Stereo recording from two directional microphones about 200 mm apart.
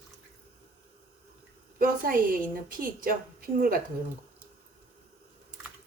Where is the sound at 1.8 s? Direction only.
45° right (ahead or behind).